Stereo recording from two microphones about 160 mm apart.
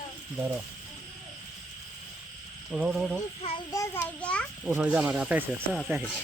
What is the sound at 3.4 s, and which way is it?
Speech, 40° left (ahead or behind).